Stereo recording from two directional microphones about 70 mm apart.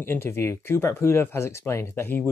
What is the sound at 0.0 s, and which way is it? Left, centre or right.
Speech, left.